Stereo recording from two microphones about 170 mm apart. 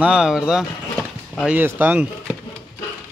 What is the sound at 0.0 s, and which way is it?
Speech, 5° right (ahead or behind).